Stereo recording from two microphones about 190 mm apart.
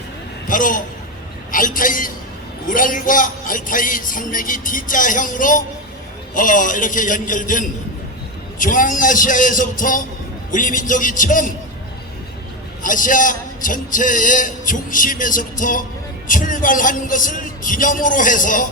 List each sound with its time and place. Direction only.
0.4 s a man's voice: 45° left (ahead or behind)
12.8 s speech: 45° left (ahead or behind)